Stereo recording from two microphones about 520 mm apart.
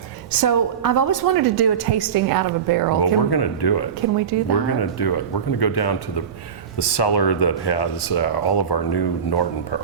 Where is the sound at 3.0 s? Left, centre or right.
Left.